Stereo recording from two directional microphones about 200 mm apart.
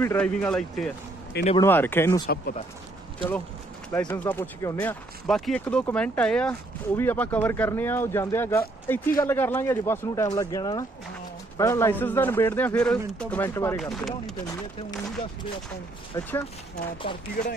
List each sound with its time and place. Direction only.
0.0 s speech: 15° left (ahead or behind)
13.7 s speech: centre (ahead or behind)
16.1 s speech: 20° left (ahead or behind)